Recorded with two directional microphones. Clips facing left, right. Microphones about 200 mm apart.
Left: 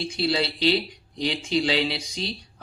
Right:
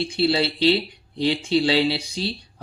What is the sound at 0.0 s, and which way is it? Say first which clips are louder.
Speech: right 4 dB; 30° right (ahead or behind).